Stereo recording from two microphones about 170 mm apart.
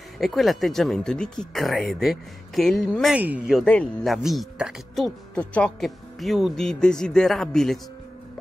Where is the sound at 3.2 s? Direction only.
10° right (ahead or behind).